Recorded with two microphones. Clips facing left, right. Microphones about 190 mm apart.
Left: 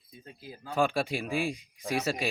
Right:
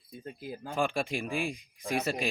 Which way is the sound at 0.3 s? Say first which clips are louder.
Right 6 dB; 55° right (ahead or behind).